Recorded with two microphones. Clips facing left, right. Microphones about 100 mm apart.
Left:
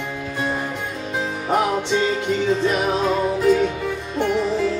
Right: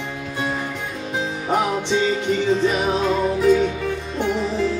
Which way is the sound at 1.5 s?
Centre (ahead or behind).